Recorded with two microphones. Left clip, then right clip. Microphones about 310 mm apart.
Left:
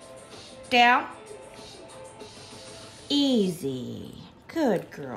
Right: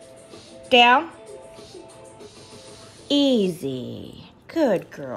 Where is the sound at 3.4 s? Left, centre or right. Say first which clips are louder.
Right 3 dB; centre.